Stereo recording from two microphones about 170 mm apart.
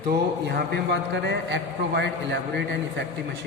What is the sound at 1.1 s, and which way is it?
A man's voice, 90° right.